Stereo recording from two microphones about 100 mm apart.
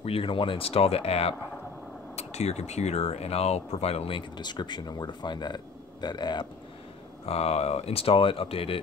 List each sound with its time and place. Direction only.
0.0 s speech: 65° left (ahead or behind); by 4.2 s 80° left
4.4 s speech: 45° left (ahead or behind)
7.2 s speech: 85° left; by 8.7 s 65° left (ahead or behind)